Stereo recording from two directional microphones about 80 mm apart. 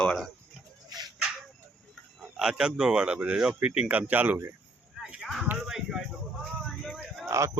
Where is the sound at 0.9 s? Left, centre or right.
Right.